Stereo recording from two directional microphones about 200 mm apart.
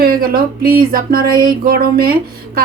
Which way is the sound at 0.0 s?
50° right (ahead or behind).